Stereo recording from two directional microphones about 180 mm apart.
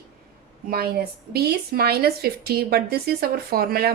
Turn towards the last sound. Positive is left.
turn(degrees=-55)  # may be behind; listen again after turning